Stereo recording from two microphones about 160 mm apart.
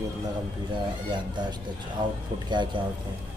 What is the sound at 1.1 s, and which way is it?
A man's voice, 25° right (ahead or behind).